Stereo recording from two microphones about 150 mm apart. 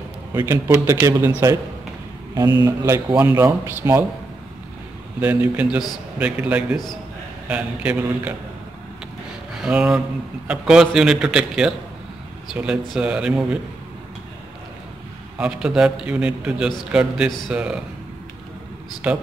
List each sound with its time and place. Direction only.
0.5 s a man's voice: 15° right (ahead or behind)
2.6 s a man's voice: 25° right (ahead or behind)
5.2 s a man's voice: 10° right (ahead or behind)
9.6 s a man's voice: 5° right (ahead or behind)
12.9 s a man's voice: 5° right (ahead or behind)
15.3 s a man's voice: 5° right (ahead or behind)
19.1 s a man's voice: 10° right (ahead or behind)